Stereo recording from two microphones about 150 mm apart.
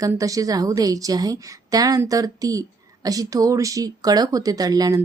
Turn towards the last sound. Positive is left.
turn(degrees=-25)  # may be behind; listen again after turning